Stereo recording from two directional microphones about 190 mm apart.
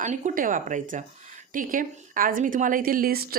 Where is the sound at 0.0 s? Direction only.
40° right (ahead or behind).